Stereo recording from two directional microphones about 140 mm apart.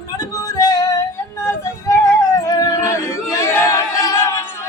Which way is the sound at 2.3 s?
25° left (ahead or behind).